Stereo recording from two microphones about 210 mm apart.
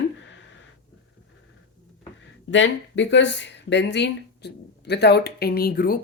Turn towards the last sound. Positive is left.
turn(degrees=45)  # may be behind; listen again after turning